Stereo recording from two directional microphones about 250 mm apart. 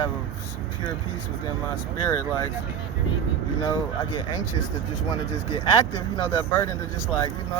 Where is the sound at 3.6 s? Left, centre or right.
Centre.